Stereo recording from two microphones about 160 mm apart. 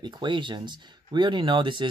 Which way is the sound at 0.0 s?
30° right (ahead or behind).